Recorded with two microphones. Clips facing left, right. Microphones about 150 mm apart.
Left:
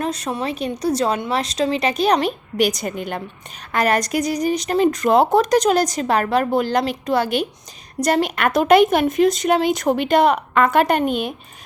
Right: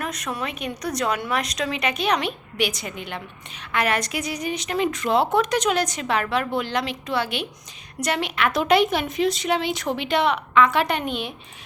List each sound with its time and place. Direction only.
0.0 s speech: 30° left (ahead or behind); by 11.3 s 45° left (ahead or behind)